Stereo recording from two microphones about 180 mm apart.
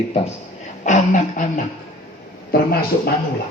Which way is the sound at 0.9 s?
45° left (ahead or behind).